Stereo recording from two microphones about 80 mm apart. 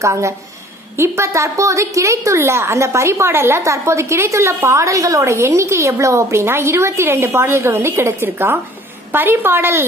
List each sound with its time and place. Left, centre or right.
0.0 s a woman's voice: right